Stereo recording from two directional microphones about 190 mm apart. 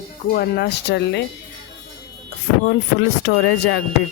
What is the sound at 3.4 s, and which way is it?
Speech, 75° left (ahead or behind).